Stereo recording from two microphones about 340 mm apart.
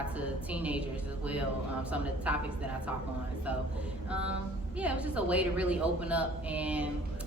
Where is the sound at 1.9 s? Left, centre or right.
Centre.